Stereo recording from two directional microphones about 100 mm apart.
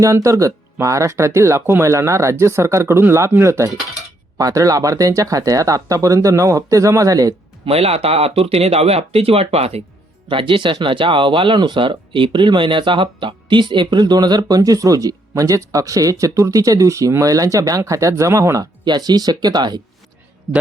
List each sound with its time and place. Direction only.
0.0 s speech: 30° right (ahead or behind)
7.6 s speech: 85° right
10.2 s speech: 60° right (ahead or behind)